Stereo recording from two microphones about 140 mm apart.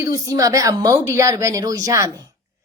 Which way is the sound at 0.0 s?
25° right (ahead or behind).